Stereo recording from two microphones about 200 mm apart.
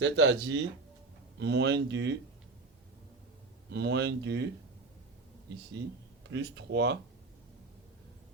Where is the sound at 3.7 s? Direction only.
60° right (ahead or behind).